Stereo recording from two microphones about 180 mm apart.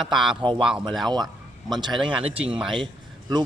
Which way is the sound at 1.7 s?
25° right (ahead or behind).